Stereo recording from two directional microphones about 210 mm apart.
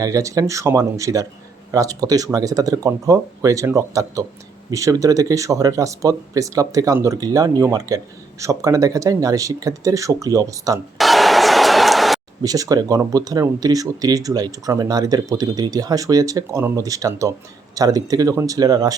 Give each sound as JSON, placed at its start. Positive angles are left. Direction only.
{"t": 0.0, "sound": "speech", "side_deg": -15}
{"t": 10.9, "sound": "a sound", "side_deg": 0}
{"t": 12.4, "sound": "speech", "side_deg": -15}